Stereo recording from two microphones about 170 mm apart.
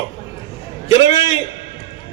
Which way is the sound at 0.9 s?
30° left (ahead or behind).